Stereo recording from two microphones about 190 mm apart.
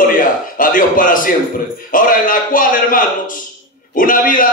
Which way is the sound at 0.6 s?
45° left (ahead or behind).